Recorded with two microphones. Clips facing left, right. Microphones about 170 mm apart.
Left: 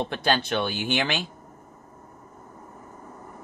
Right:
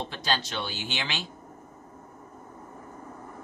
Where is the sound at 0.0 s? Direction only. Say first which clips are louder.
Left 6 dB; 55° left (ahead or behind).